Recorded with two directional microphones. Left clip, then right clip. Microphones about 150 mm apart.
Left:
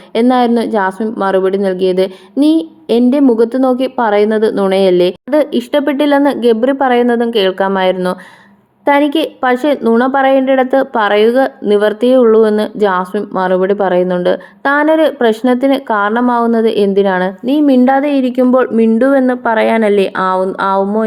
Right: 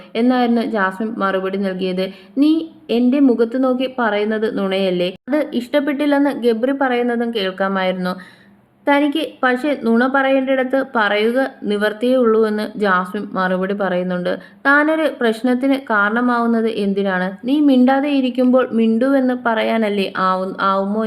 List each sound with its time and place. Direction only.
0.1 s a woman's voice: 35° left (ahead or behind)